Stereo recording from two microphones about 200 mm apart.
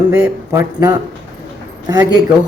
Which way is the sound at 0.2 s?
15° right (ahead or behind).